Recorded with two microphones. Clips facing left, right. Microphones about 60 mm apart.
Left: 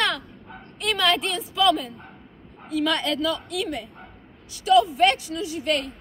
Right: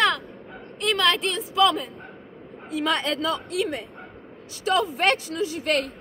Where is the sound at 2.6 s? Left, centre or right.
Right.